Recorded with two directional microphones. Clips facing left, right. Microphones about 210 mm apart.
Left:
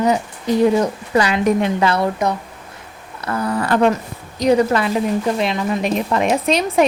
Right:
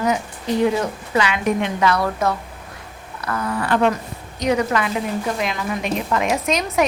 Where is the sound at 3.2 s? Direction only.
30° left (ahead or behind).